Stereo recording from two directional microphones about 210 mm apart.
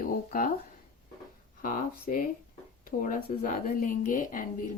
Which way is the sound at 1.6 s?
40° left (ahead or behind).